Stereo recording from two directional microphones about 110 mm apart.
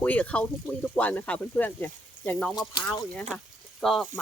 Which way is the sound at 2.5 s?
45° left (ahead or behind).